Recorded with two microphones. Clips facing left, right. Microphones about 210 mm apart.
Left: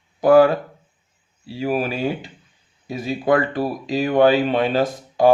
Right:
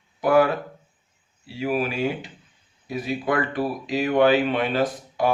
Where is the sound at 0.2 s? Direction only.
30° left (ahead or behind).